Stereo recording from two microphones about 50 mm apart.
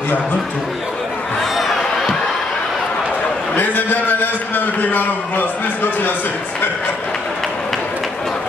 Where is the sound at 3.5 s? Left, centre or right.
Left.